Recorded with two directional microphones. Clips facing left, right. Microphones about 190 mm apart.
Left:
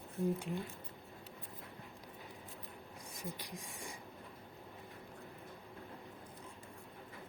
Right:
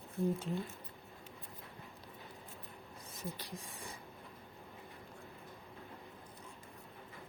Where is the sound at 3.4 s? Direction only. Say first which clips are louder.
Even; 15° left (ahead or behind).